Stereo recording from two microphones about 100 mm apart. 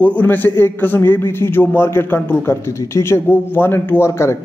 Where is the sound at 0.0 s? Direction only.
15° left (ahead or behind).